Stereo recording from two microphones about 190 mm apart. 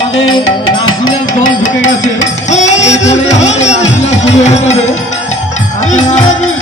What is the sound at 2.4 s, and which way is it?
Music, 40° left (ahead or behind).